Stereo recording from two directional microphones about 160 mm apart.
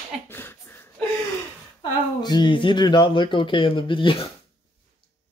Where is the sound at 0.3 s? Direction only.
15° left (ahead or behind).